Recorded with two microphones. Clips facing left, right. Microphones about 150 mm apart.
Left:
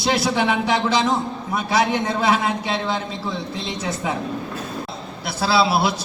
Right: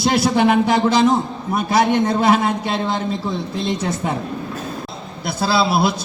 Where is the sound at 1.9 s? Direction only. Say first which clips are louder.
Right 4 dB; 50° right (ahead or behind).